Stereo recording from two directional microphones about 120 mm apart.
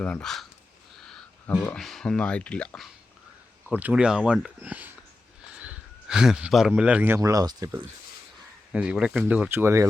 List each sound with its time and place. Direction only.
0.0 s speech: 10° left (ahead or behind)
1.7 s speech: centre (ahead or behind)
3.7 s speech: 10° right (ahead or behind)
7.2 s speech: 30° right (ahead or behind)
8.7 s speech: 10° right (ahead or behind)